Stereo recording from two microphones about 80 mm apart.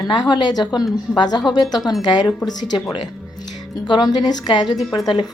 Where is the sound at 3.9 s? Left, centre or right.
Left.